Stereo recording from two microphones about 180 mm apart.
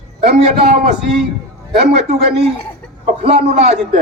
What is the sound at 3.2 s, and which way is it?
Speech, 40° right (ahead or behind).